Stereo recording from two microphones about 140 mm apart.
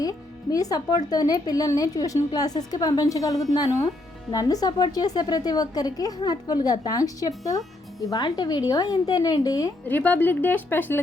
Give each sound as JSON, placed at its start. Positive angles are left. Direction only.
{"t": 0.0, "sound": "speech", "side_deg": 25}
{"t": 9.8, "sound": "speech", "side_deg": 10}